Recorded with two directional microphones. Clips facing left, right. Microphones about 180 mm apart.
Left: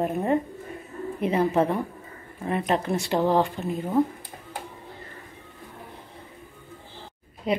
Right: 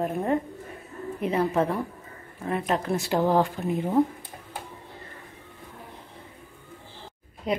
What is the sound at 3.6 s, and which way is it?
Speech, 20° left (ahead or behind).